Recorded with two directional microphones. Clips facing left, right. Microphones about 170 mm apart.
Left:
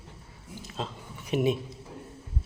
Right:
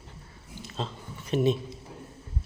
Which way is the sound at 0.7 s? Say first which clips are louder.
Right 1 dB; 10° left (ahead or behind).